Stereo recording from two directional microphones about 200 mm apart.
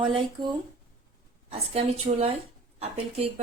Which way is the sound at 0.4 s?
25° right (ahead or behind).